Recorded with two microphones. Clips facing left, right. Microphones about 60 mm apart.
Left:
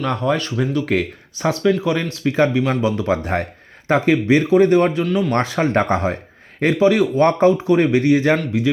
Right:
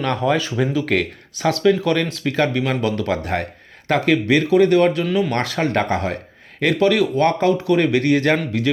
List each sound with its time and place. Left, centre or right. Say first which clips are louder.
0.0 s speech: right 1 dB; centre
0.9 s speech: even; centre
5.0 s speech: even; centre
5.6 s speech: left 2 dB; left